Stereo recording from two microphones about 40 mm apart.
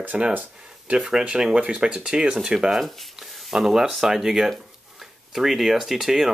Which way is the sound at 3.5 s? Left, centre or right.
Centre.